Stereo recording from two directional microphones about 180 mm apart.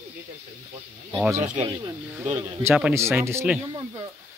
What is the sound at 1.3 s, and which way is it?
Speech, 40° right (ahead or behind).